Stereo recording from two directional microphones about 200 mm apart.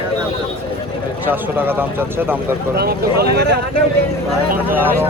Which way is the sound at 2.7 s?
50° right (ahead or behind).